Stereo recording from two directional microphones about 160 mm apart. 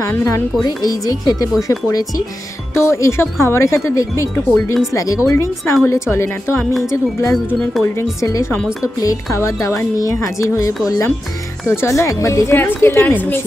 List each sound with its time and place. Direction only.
0.0 s a woman's voice: 20° left (ahead or behind)
7.5 s speech: centre (ahead or behind)
7.8 s a woman's voice: 20° left (ahead or behind)